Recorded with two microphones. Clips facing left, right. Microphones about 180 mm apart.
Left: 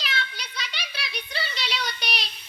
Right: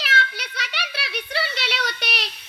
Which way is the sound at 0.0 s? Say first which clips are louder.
Right 6 dB; 70° right (ahead or behind).